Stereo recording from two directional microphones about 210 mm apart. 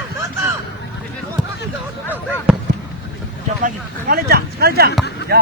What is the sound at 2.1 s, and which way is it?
Basketball bounce, 10° right (ahead or behind).